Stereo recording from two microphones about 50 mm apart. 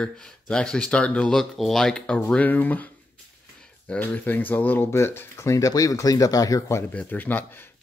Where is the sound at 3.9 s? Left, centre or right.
Left.